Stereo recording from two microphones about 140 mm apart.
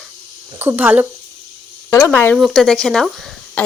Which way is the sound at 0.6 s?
15° right (ahead or behind).